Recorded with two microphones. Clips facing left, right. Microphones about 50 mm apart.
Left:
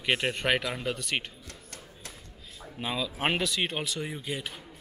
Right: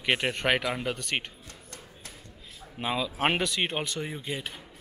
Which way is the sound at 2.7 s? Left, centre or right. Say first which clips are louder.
Right 3 dB; centre.